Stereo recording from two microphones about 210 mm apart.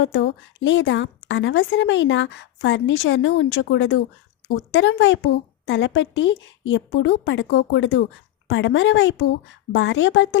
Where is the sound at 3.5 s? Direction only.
60° left (ahead or behind).